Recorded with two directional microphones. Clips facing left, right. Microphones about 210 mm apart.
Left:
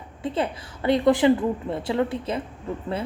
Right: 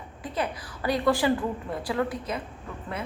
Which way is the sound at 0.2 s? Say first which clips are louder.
Left 5 dB; 25° left (ahead or behind).